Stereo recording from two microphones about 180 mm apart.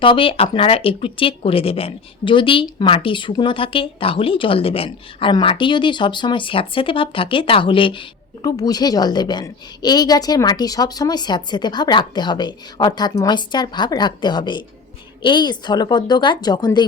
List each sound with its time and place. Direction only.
0.0 s speech: 30° left (ahead or behind)